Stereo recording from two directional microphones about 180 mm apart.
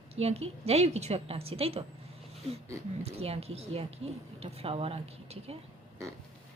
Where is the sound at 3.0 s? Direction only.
35° right (ahead or behind).